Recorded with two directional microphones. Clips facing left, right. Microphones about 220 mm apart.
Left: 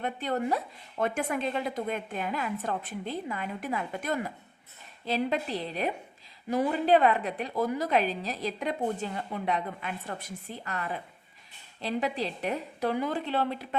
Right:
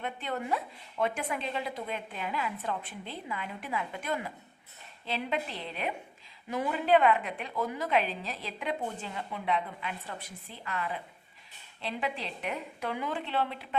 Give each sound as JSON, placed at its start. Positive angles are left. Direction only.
{"t": 0.0, "sound": "a woman's voice", "side_deg": 40}